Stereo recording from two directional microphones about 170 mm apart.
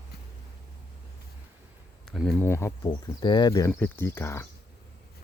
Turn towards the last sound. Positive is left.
turn(degrees=15)  # may be behind; listen again after turning